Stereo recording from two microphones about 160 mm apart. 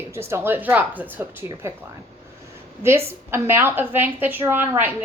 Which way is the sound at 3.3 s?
15° right (ahead or behind).